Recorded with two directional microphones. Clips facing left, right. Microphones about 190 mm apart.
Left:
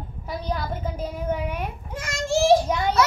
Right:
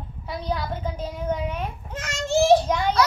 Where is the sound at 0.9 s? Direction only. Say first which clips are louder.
Left 1 dB; 10° left (ahead or behind).